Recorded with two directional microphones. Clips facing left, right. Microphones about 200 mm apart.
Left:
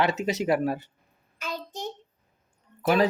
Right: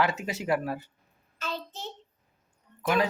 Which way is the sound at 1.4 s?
10° left (ahead or behind).